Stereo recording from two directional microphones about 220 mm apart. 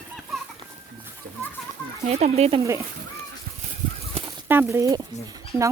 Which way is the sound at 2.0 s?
30° right (ahead or behind).